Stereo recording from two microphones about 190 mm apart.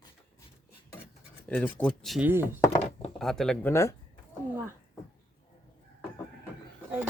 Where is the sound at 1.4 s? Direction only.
5° left (ahead or behind).